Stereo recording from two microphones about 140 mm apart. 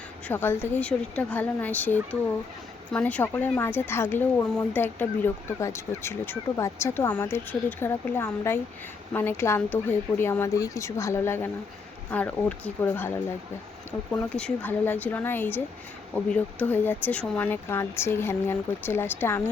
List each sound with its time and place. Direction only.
0.3 s speech: 15° left (ahead or behind)
14.3 s speech: 10° left (ahead or behind)